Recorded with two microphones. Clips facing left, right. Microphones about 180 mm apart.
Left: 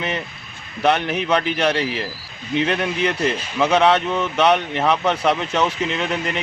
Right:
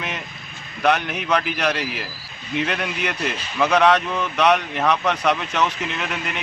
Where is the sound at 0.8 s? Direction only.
30° left (ahead or behind).